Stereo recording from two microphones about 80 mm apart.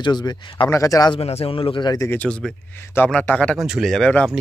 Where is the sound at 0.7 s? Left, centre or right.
Left.